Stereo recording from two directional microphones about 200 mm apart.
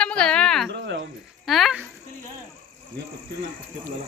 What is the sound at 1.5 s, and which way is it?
Speech, centre (ahead or behind).